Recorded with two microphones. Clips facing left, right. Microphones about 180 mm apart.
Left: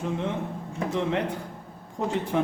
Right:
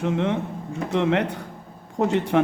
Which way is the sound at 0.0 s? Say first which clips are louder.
Right 5 dB; 70° right (ahead or behind).